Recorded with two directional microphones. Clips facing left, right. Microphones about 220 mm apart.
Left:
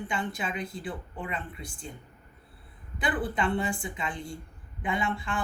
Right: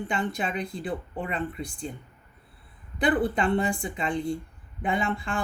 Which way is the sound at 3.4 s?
35° right (ahead or behind).